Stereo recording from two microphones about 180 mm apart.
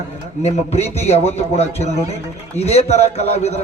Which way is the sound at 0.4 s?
35° left (ahead or behind).